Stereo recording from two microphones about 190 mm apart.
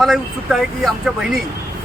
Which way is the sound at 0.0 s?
Centre (ahead or behind).